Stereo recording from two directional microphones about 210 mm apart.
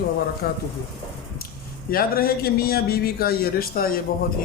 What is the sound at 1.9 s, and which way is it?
A man's voice, 45° left (ahead or behind).